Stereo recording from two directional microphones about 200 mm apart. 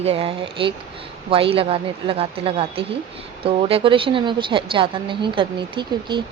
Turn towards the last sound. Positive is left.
turn(degrees=-25)  # may be behind; listen again after turning